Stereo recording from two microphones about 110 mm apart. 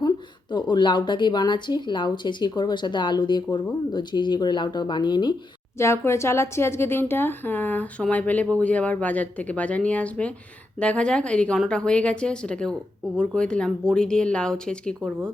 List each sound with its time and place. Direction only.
0.5 s speech: 45° left (ahead or behind)
5.7 s speech: 25° left (ahead or behind); by 15.1 s 5° left (ahead or behind)